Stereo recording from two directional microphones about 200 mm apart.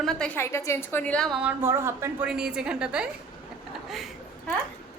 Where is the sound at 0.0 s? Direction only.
Centre (ahead or behind).